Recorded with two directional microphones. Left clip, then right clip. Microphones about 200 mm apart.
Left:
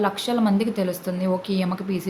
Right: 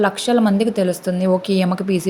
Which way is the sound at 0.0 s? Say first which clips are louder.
Right 6 dB; 25° right (ahead or behind).